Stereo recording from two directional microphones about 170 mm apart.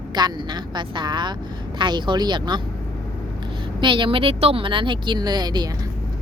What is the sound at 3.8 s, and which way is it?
A woman's voice, 30° right (ahead or behind).